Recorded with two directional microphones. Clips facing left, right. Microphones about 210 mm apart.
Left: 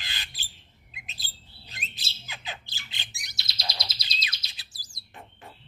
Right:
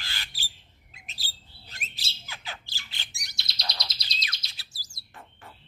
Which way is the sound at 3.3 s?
Centre (ahead or behind).